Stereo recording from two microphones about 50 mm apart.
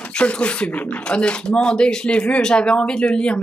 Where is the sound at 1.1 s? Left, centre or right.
Centre.